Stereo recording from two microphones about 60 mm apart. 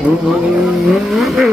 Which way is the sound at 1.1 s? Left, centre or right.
Centre.